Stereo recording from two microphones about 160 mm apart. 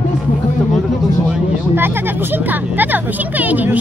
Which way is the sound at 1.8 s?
15° right (ahead or behind).